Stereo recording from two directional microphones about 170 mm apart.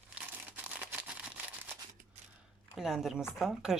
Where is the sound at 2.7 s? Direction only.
Centre (ahead or behind).